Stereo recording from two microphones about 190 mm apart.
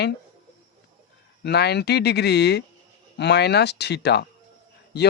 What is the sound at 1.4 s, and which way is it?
Speech, 60° left (ahead or behind).